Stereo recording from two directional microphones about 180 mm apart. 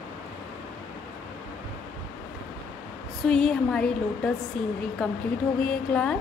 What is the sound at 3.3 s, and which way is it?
A woman's voice, centre (ahead or behind).